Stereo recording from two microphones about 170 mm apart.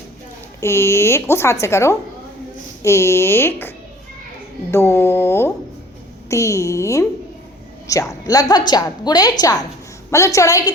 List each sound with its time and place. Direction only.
0.6 s a woman's voice: 15° left (ahead or behind)